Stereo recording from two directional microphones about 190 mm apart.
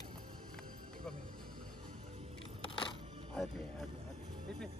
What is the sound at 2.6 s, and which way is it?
Music, 25° left (ahead or behind).